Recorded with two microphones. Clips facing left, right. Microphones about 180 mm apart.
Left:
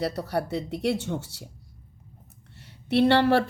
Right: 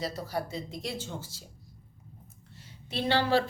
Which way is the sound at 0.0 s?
65° left (ahead or behind).